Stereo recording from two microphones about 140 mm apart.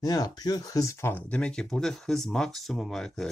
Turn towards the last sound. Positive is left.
turn(degrees=5)  # may be behind; listen again after turning